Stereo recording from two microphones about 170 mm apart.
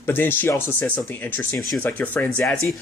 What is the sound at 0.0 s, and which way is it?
Speech, 10° left (ahead or behind).